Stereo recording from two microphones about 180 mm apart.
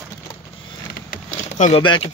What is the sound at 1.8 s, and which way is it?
Speech, 25° left (ahead or behind).